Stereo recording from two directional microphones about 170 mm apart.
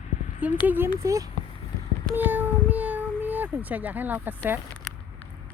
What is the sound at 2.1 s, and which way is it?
Child singing, 10° right (ahead or behind).